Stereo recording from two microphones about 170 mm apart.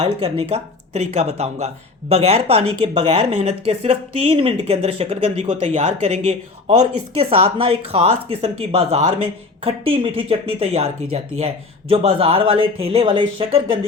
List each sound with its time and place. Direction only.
0.0 s speech: 35° right (ahead or behind)